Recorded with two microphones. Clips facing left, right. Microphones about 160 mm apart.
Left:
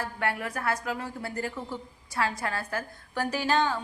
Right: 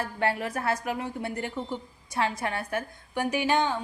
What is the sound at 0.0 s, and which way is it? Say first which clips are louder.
A woman's voice: right 3 dB; 25° right (ahead or behind).